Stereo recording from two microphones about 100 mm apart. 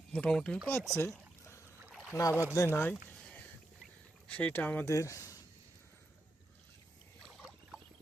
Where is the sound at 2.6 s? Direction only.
25° left (ahead or behind).